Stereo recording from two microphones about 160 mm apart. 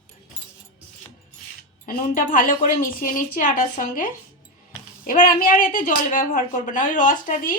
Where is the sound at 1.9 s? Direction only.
60° left (ahead or behind).